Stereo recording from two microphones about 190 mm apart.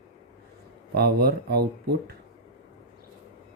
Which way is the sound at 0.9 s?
55° right (ahead or behind).